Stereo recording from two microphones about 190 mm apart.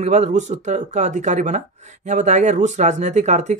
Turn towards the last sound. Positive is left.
turn(degrees=-40)  # may be behind; listen again after turning